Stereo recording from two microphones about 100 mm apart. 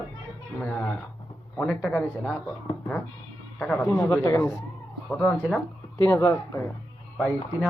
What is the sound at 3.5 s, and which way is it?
Speech, 5° left (ahead or behind).